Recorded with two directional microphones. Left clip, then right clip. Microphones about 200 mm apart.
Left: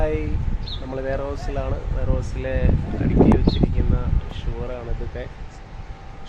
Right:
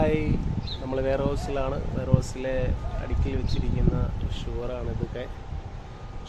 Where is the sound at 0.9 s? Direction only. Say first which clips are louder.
Right 1 dB; centre (ahead or behind).